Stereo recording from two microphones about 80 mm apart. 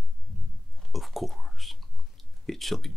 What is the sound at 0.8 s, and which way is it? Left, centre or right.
Whispering, centre.